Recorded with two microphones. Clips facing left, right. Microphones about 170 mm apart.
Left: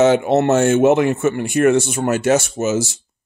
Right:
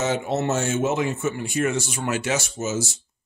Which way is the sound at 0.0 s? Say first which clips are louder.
Left 10 dB; 65° left (ahead or behind).